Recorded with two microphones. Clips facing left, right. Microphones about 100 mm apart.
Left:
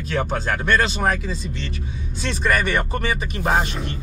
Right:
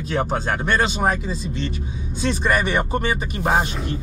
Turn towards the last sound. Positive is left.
turn(degrees=-5)  # may be behind; listen again after turning